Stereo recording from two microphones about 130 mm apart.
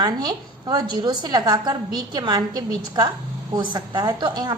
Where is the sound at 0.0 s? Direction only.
30° right (ahead or behind).